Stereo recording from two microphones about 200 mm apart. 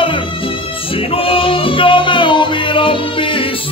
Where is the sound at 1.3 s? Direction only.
25° left (ahead or behind).